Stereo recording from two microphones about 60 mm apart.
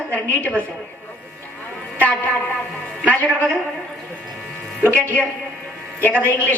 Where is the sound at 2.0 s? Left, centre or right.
Left.